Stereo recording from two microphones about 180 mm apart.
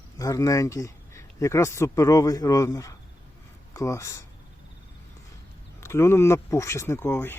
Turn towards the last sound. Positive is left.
turn(degrees=10)  # may be behind; listen again after turning